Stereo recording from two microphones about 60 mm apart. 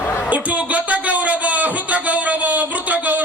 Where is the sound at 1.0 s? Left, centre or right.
Right.